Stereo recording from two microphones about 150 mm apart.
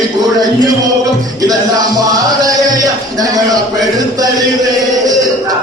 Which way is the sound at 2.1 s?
25° right (ahead or behind).